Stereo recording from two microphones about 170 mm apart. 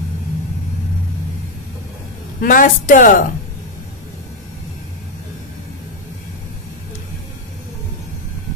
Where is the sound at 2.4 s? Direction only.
55° left (ahead or behind).